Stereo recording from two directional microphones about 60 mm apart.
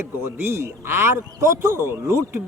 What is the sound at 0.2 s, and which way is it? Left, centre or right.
A man's voice, right.